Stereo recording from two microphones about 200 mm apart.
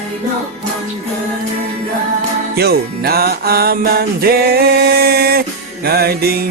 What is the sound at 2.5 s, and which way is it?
Music, 50° right (ahead or behind).